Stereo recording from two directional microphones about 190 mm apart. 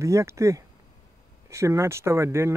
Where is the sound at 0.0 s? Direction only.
15° right (ahead or behind).